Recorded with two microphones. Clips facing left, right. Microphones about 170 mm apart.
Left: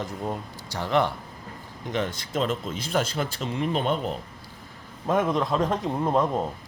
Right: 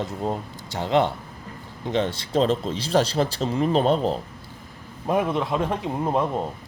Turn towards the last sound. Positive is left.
turn(degrees=-5)  # may be behind; listen again after turning